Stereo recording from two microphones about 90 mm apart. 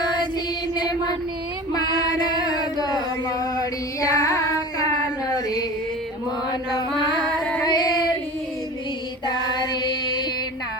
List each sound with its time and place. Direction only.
0.8 s music: 50° left (ahead or behind)
1.7 s female singing: 45° left (ahead or behind)
6.5 s chant: 50° left (ahead or behind)
7.6 s female singing: 50° left (ahead or behind)
9.2 s child singing: 50° left (ahead or behind)